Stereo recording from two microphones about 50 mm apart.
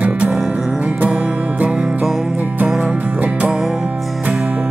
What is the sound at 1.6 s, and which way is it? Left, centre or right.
Music, right.